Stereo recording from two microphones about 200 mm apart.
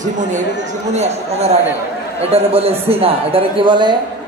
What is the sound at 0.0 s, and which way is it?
A man's voice, 35° right (ahead or behind).